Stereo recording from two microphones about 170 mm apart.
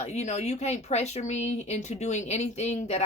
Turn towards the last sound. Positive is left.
turn(degrees=40)  # may be behind; listen again after turning